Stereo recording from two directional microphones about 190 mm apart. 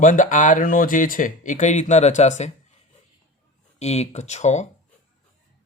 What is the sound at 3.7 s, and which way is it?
Speech, 35° left (ahead or behind).